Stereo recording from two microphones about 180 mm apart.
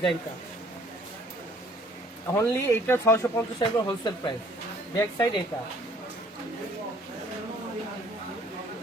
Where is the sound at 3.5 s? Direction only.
25° left (ahead or behind).